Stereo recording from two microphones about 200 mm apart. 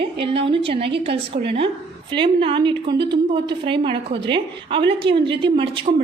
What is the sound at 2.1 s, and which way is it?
A woman's voice, 25° right (ahead or behind).